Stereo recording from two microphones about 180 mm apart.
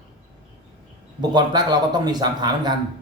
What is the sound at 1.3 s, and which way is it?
Speech, 25° right (ahead or behind).